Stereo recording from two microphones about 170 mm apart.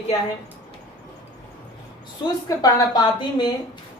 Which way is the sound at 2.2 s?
25° left (ahead or behind).